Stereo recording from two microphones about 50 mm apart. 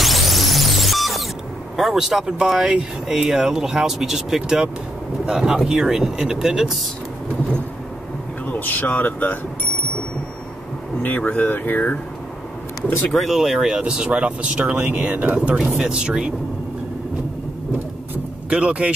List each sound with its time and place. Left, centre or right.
0.0 s music: centre
1.8 s speech: centre
8.5 s speech: left
11.0 s speech: left
13.1 s speech: centre
13.6 s speech: centre
18.5 s speech: right